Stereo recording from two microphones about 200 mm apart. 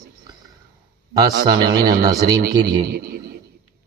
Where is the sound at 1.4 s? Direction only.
20° right (ahead or behind).